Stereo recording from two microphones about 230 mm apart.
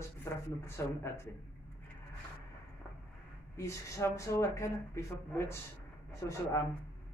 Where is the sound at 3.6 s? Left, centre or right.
Centre.